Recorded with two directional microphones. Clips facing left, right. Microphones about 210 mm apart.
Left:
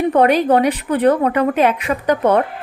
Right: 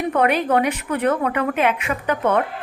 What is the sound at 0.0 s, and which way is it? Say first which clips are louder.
A woman's voice: left 5 dB; 35° left (ahead or behind).